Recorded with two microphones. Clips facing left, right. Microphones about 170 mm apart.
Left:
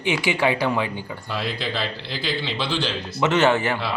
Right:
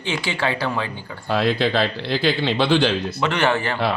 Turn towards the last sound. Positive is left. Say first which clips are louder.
# left 2 dB
turn(degrees=15)  # may be behind; listen again after turning